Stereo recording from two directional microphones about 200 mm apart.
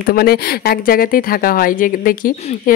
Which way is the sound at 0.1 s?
50° left (ahead or behind).